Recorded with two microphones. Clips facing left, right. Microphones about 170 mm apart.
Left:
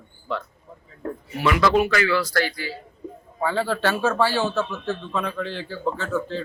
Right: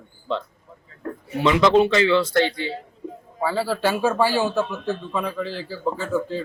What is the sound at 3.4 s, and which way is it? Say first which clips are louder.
Speech: right 1 dB; 5° right (ahead or behind).